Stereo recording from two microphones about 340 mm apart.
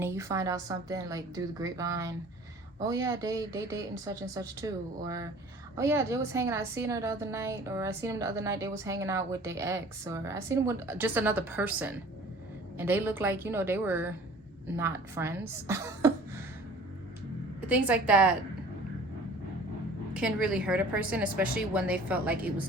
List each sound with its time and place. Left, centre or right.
0.0 s a woman's voice: centre
17.7 s a woman's voice: centre
20.1 s a woman's voice: centre